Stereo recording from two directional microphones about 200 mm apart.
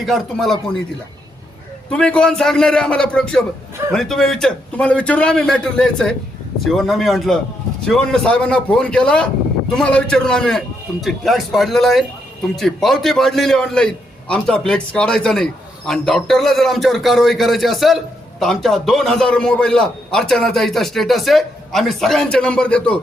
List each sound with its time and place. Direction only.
0.0 s a man's voice: centre (ahead or behind)
1.9 s a man's voice: 5° left (ahead or behind)